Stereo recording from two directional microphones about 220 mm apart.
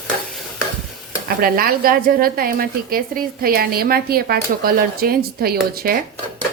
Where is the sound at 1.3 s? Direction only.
40° right (ahead or behind).